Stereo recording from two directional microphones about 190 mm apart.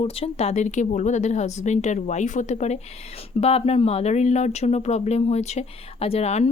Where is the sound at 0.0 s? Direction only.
30° left (ahead or behind).